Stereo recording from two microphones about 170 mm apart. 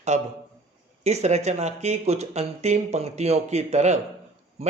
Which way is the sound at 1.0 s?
40° right (ahead or behind).